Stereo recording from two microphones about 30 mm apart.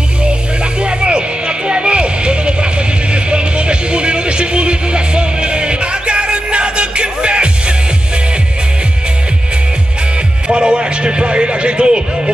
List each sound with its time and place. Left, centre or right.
0.7 s music: right
1.7 s vehicle: right
10.5 s a sound: right